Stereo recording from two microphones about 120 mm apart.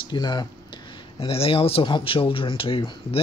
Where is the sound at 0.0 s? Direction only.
40° left (ahead or behind).